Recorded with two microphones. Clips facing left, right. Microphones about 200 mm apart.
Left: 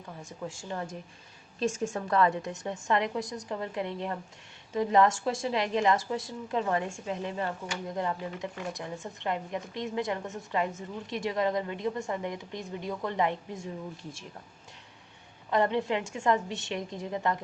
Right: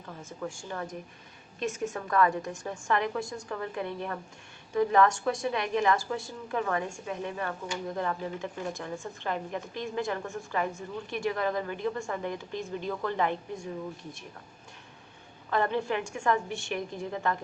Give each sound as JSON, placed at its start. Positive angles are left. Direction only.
{"t": 0.3, "sound": "speech", "side_deg": 20}
{"t": 15.4, "sound": "speech", "side_deg": 20}